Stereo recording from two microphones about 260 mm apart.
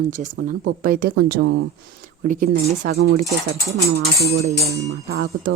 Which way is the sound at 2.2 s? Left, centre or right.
Right.